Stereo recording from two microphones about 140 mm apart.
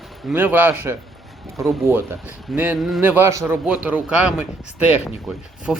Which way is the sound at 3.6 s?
10° right (ahead or behind).